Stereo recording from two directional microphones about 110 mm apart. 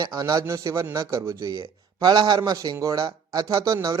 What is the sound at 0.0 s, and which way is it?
Speech, 35° right (ahead or behind).